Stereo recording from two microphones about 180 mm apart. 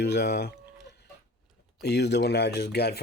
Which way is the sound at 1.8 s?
65° left (ahead or behind).